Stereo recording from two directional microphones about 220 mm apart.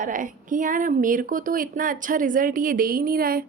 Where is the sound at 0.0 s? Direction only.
35° right (ahead or behind).